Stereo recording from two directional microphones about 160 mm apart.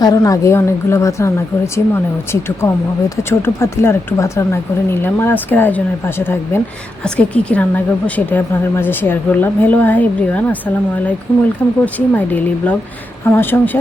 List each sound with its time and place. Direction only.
0.0 s a woman's voice: 20° left (ahead or behind)